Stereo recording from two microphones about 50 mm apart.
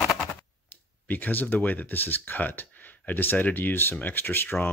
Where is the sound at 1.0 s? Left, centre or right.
Left.